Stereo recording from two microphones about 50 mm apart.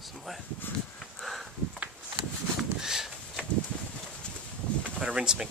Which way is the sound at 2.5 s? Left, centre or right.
Centre.